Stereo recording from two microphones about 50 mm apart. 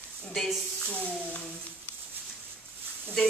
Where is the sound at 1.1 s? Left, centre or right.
Left.